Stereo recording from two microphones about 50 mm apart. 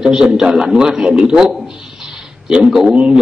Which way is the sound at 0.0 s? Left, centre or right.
Centre.